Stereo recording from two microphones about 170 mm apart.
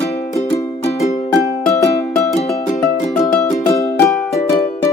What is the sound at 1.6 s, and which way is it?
Music, 20° left (ahead or behind).